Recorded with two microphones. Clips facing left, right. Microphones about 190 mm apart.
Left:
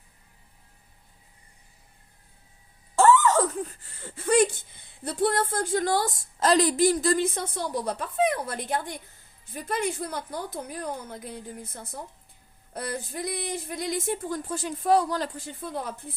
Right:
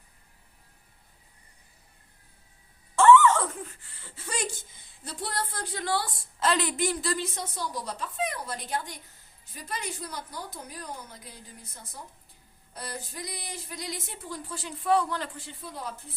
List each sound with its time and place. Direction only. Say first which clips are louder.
2.9 s a woman's voice: right 1 dB; 40° left (ahead or behind); by 16.1 s 55° left (ahead or behind)